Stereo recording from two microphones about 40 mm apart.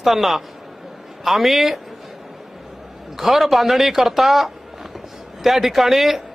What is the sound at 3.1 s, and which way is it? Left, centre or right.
Speech, centre.